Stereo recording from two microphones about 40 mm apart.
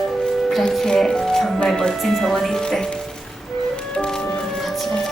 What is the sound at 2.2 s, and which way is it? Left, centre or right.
Speech, centre.